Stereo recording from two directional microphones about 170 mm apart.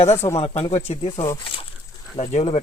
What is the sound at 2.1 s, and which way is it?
Speech, 40° left (ahead or behind).